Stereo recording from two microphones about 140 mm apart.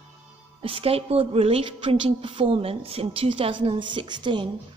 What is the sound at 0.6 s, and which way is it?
A woman's voice, 40° right (ahead or behind).